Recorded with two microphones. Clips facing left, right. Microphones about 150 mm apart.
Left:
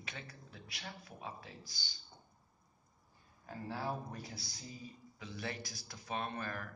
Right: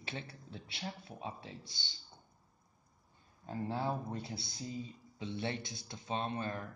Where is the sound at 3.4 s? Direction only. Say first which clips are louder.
Right 5 dB; 25° right (ahead or behind).